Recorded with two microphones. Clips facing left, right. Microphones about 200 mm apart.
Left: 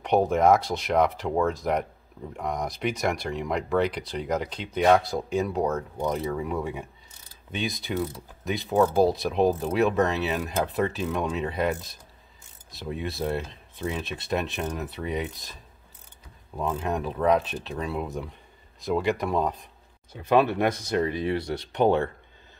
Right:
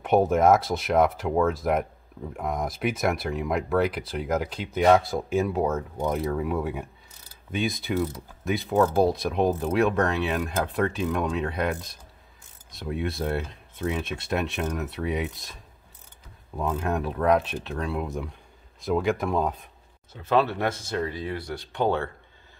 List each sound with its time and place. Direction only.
0.0 s speech: 5° right (ahead or behind)
16.5 s speech: centre (ahead or behind)
20.1 s speech: 15° left (ahead or behind)